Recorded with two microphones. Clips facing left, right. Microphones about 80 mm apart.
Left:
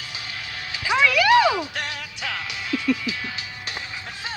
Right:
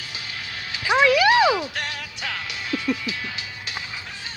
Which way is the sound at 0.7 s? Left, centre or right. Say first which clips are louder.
Right 3 dB; centre.